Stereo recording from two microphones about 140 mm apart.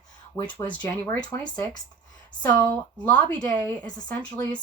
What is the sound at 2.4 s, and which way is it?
Speech, 10° left (ahead or behind).